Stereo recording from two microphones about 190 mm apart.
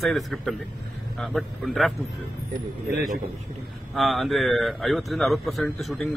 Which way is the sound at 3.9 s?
Centre (ahead or behind).